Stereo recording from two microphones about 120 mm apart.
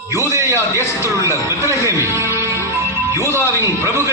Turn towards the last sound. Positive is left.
turn(degrees=-25)  # may be behind; listen again after turning